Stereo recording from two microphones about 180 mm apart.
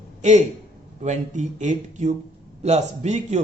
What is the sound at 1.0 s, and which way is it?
A man's voice, 40° right (ahead or behind).